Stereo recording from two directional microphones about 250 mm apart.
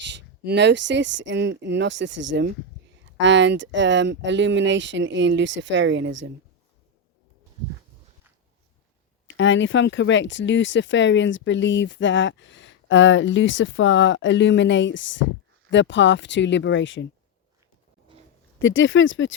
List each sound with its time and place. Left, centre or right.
0.0 s speech: right
9.2 s speech: left
18.6 s speech: left